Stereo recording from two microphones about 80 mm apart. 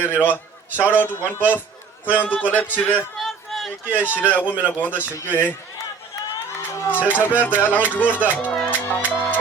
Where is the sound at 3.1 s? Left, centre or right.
Centre.